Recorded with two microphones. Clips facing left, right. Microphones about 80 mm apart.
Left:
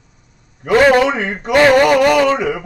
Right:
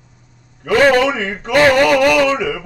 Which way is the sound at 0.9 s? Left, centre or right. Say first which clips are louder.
Left 1 dB; left.